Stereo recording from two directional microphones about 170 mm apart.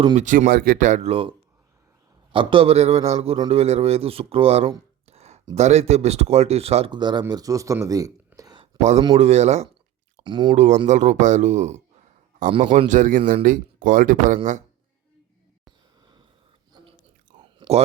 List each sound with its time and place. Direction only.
0.2 s speech: 50° right (ahead or behind); by 4.7 s 35° right (ahead or behind)
5.0 s a sound: 40° right (ahead or behind)
5.5 s speech: 40° right (ahead or behind); by 8.6 s 20° right (ahead or behind)
9.1 s speech: 40° right (ahead or behind)
10.2 s speech: 25° right (ahead or behind)
10.5 s speech: 45° right (ahead or behind)
12.5 s speech: 30° right (ahead or behind)
12.9 s speech: 50° right (ahead or behind)
16.7 s chewing: 25° right (ahead or behind)
17.6 s a sound: 40° right (ahead or behind)